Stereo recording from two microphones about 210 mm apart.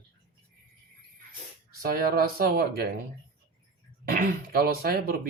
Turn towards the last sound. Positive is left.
turn(degrees=-45)  # may be behind; listen again after turning